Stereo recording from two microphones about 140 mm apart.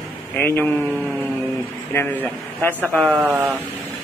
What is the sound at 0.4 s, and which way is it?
Speech, 15° left (ahead or behind).